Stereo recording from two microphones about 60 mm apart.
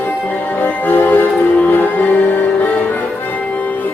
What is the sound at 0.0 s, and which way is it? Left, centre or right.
Music, left.